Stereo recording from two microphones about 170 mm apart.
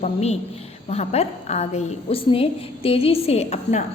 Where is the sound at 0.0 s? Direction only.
40° left (ahead or behind).